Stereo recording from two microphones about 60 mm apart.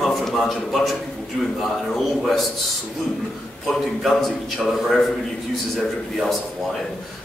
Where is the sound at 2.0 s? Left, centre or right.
Centre.